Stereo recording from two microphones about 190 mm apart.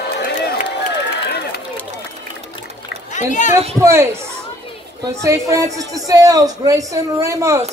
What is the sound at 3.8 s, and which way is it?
Speech, 15° right (ahead or behind).